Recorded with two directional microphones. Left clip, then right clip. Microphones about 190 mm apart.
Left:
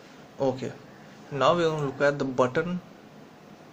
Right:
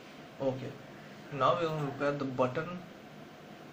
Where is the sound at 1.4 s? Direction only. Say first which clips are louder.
Left 6 dB; 50° left (ahead or behind).